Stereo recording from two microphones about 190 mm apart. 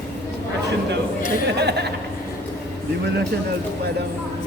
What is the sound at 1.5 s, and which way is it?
Speech, 60° right (ahead or behind).